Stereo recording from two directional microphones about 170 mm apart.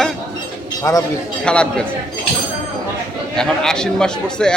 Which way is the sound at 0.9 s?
20° left (ahead or behind).